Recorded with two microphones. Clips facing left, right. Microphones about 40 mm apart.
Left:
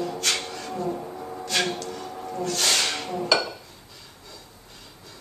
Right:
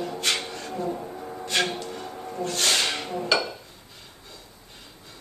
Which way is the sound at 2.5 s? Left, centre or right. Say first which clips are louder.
Right 1 dB; centre.